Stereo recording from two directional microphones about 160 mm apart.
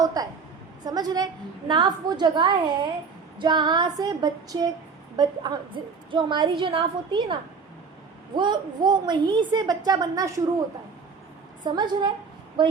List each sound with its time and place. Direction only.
0.0 s a woman's voice: 25° right (ahead or behind)
8.4 s a woman's voice: 25° right (ahead or behind)
11.6 s a woman's voice: 25° right (ahead or behind)